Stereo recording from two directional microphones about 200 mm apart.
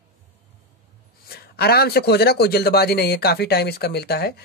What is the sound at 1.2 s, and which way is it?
A man's voice, 50° left (ahead or behind).